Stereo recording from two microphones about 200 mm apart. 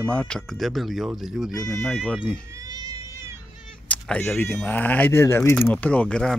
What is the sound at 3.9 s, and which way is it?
Speech, 5° left (ahead or behind).